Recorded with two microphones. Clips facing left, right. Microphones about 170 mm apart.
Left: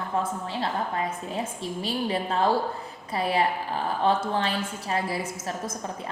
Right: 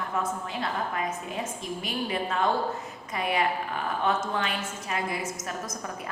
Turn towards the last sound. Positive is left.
turn(degrees=30)  # may be behind; listen again after turning